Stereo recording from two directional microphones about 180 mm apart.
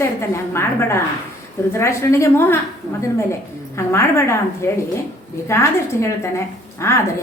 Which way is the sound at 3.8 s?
15° left (ahead or behind).